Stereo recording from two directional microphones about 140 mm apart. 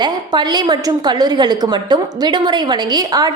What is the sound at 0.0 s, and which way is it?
A woman's voice, 30° right (ahead or behind).